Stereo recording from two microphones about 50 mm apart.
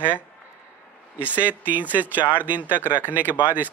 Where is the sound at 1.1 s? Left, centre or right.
Right.